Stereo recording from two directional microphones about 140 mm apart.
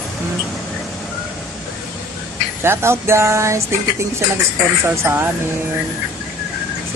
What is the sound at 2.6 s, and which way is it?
Speech, 20° right (ahead or behind).